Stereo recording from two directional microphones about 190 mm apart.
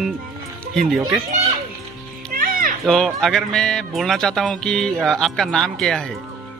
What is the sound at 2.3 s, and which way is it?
Music, 50° right (ahead or behind).